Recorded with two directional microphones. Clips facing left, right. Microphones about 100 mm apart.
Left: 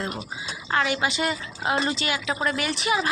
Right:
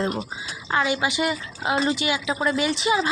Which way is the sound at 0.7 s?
15° right (ahead or behind).